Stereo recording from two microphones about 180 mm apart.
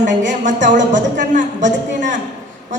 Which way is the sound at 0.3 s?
45° right (ahead or behind).